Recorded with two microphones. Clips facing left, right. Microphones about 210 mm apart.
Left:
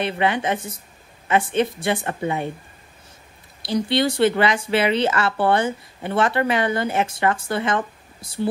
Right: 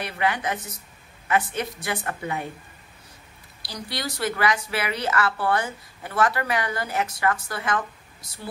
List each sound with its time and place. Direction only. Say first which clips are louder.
0.0 s a woman's voice: left 5 dB; 25° left (ahead or behind)
3.6 s a woman's voice: left 12 dB; 25° left (ahead or behind)